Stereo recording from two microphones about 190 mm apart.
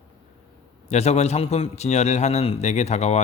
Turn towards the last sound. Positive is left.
turn(degrees=35)  # may be behind; listen again after turning